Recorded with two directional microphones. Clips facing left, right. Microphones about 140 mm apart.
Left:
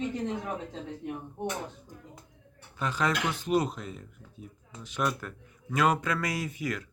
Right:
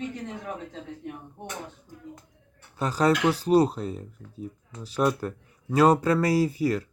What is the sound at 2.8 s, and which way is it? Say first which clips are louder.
Speech: right 7 dB; 35° right (ahead or behind).